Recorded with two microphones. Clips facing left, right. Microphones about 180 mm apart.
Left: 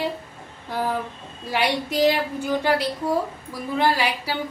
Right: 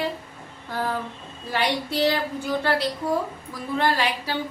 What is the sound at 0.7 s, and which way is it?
A woman's voice, 10° left (ahead or behind).